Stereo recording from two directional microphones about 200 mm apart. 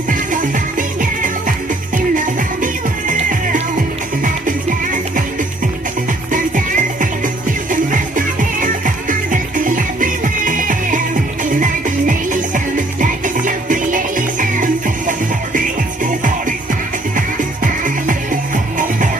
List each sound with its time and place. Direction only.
0.1 s music: 40° right (ahead or behind)
6.3 s music: 40° right (ahead or behind)
17.8 s music: 40° right (ahead or behind)